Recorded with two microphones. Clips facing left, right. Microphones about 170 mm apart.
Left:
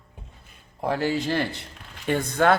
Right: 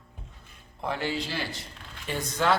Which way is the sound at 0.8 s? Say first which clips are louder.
Left 6 dB; 40° left (ahead or behind).